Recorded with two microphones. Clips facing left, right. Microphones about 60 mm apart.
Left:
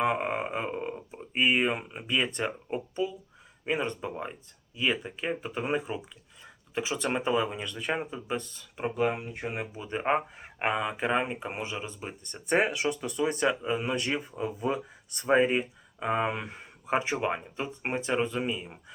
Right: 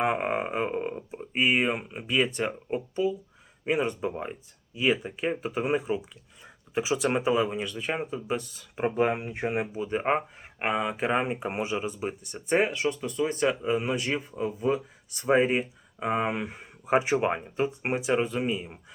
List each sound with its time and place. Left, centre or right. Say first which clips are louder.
0.0 s speech: right 1 dB; centre
8.7 s speech: right 3 dB; right
12.5 s speech: right 1 dB; centre